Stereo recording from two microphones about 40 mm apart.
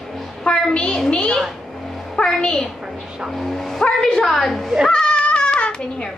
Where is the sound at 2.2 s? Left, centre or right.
Left.